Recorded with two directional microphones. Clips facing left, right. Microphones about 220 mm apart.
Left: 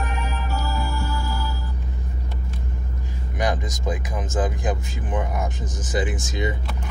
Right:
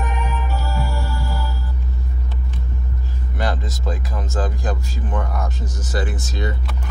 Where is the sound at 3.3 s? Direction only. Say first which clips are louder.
Left 1 dB; 15° left (ahead or behind).